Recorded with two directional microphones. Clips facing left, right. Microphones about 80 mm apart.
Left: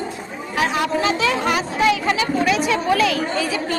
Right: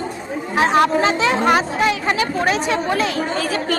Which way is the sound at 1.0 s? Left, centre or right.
Right.